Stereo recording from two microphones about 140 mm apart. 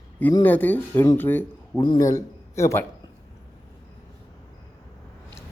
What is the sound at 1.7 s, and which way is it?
Speech, 30° left (ahead or behind).